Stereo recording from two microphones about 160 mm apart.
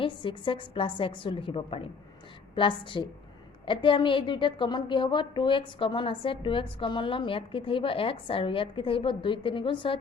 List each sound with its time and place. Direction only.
0.0 s a woman's voice: 30° left (ahead or behind)